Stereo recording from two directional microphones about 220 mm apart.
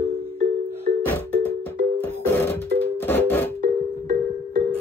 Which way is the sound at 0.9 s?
35° right (ahead or behind).